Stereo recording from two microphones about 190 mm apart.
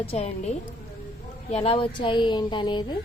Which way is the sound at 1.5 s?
30° left (ahead or behind).